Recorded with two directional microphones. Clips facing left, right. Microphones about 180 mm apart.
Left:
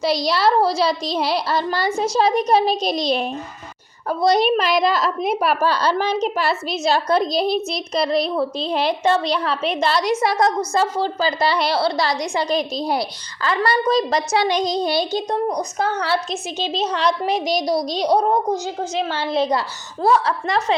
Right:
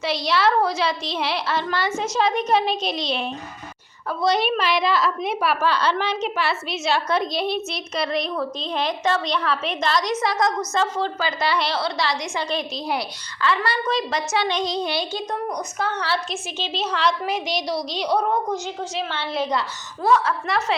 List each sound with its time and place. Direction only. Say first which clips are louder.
0.0 s a woman's voice: left 3 dB; 35° left (ahead or behind)